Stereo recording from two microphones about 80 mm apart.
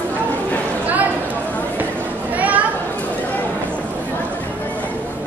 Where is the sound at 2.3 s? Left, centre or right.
Centre.